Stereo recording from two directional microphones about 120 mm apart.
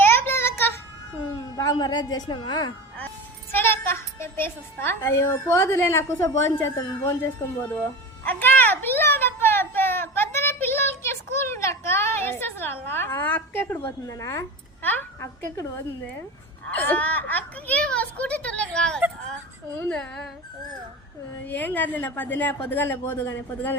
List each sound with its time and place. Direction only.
0.0 s child singing: 20° left (ahead or behind)
1.5 s a woman's voice: 30° left (ahead or behind)
3.5 s a woman's voice: 15° left (ahead or behind)
8.2 s a sound: 15° left (ahead or behind)
16.6 s a child's voice: 15° left (ahead or behind)
21.4 s a child's voice: 15° left (ahead or behind)